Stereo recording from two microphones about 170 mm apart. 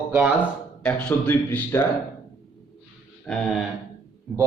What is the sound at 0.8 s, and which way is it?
Speech, 5° left (ahead or behind).